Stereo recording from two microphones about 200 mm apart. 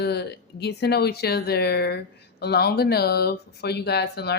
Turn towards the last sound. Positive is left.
turn(degrees=55)  # may be behind; listen again after turning